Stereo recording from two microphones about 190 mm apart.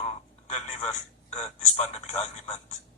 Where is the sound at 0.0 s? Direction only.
35° left (ahead or behind).